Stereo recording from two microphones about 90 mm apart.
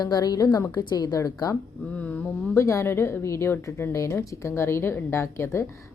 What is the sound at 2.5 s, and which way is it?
A woman's voice, 35° left (ahead or behind).